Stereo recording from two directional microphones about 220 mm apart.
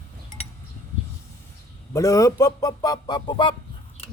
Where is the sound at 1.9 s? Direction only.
15° left (ahead or behind).